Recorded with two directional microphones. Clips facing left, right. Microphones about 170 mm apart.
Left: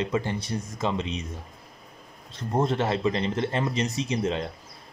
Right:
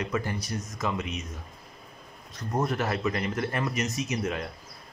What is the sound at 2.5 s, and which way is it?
Speech, 25° left (ahead or behind).